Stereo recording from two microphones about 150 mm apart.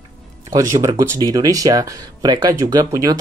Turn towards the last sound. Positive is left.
turn(degrees=-25)  # may be behind; listen again after turning